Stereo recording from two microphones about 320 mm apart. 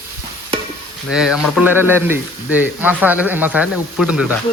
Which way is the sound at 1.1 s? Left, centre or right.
Centre.